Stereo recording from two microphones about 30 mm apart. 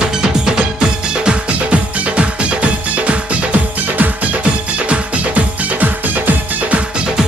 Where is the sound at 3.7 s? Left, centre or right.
Right.